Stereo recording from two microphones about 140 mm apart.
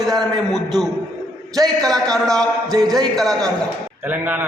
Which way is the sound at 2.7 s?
30° right (ahead or behind).